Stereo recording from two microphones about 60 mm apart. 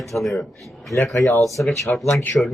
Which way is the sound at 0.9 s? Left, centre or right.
Left.